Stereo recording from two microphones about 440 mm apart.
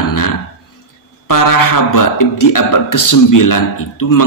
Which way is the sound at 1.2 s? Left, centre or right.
Left.